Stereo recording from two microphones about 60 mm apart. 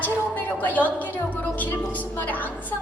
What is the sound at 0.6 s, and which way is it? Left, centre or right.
Music, left.